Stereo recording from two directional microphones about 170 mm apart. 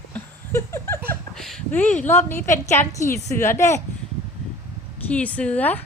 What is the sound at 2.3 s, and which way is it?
A woman's voice, 15° left (ahead or behind).